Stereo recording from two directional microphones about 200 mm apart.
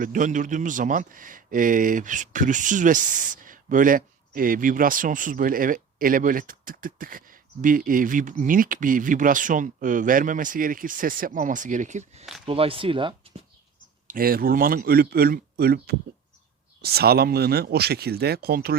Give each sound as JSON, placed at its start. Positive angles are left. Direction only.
{"t": 0.0, "sound": "a man's voice", "side_deg": -40}
{"t": 14.1, "sound": "speech", "side_deg": -45}